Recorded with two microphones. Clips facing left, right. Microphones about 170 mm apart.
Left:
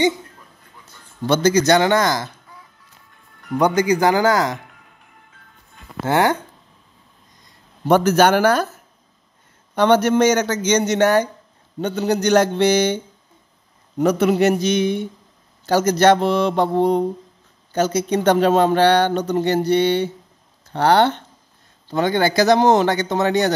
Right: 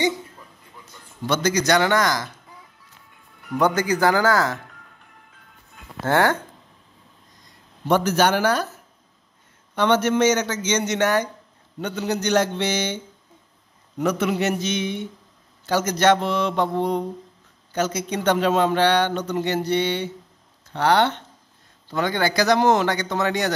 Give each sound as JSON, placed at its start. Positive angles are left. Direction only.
{"t": 1.2, "sound": "speech", "side_deg": 30}
{"t": 3.5, "sound": "speech", "side_deg": 15}
{"t": 6.0, "sound": "speech", "side_deg": 15}
{"t": 7.9, "sound": "speech", "side_deg": 45}
{"t": 9.8, "sound": "speech", "side_deg": 35}